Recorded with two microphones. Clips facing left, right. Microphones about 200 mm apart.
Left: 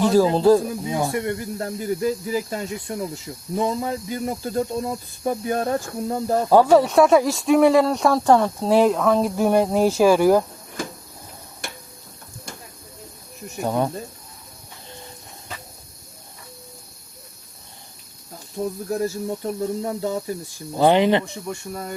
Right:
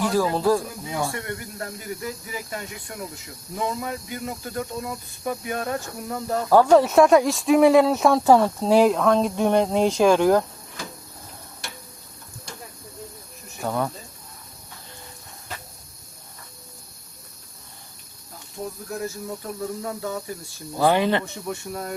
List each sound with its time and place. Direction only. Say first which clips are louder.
0.0 s speech: left 5 dB; 25° left (ahead or behind)
6.7 s speech: even; centre (ahead or behind)
11.6 s tick-tock: left 4 dB; 55° left (ahead or behind)
13.6 s speech: left 3 dB; 20° left (ahead or behind)
18.9 s speech: left 6 dB; 30° left (ahead or behind)
21.4 s speech: even; centre (ahead or behind)